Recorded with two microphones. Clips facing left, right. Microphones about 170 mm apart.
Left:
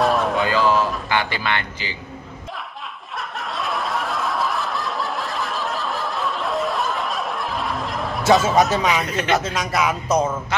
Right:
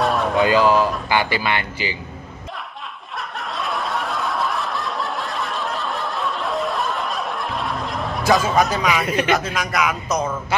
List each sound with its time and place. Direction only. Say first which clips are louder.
0.0 s a sound: left 1 dB; centre (ahead or behind)
0.4 s speech: right 3 dB; 15° right (ahead or behind)
3.2 s snicker: even; centre (ahead or behind)
8.4 s a man's voice: left 1 dB; centre (ahead or behind)
9.0 s speech: right 4 dB; 10° right (ahead or behind)
9.3 s speech: even; 25° left (ahead or behind)